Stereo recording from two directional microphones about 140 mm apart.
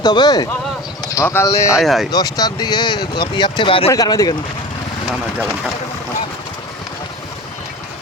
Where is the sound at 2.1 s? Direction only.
25° left (ahead or behind).